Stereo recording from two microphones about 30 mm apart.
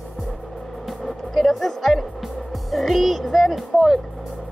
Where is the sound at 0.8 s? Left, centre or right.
Centre.